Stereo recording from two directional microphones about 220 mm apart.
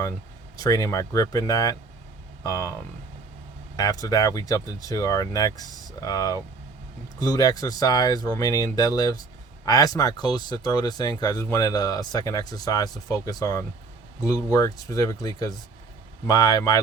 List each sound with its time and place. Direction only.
0.6 s speech: 15° left (ahead or behind)
3.8 s speech: 15° left (ahead or behind)